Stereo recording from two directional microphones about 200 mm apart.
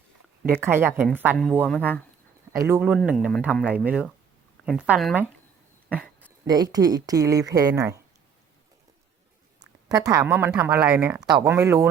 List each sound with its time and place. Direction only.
0.6 s speech: 10° right (ahead or behind)
1.6 s speech: 5° left (ahead or behind)
2.6 s speech: 10° right (ahead or behind)
5.9 s a sound: 10° right (ahead or behind)
6.4 s speech: 20° right (ahead or behind)
9.6 s a woman's voice: 20° right (ahead or behind)